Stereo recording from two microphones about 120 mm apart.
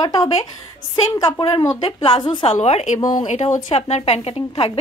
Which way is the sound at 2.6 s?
70° left (ahead or behind).